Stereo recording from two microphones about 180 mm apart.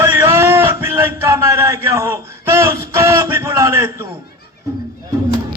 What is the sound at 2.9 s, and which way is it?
A man's voice, 15° right (ahead or behind).